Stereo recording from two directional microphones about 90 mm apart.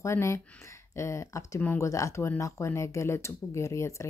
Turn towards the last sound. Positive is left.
turn(degrees=35)  # may be behind; listen again after turning